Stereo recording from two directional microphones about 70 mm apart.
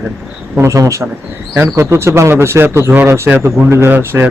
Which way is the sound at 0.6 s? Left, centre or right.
Right.